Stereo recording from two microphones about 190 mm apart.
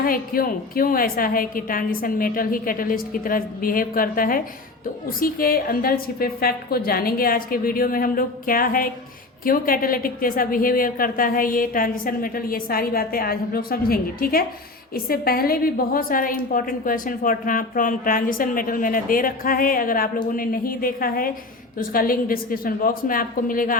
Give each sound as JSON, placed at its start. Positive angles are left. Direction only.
{"t": 0.0, "sound": "a woman's voice", "side_deg": 50}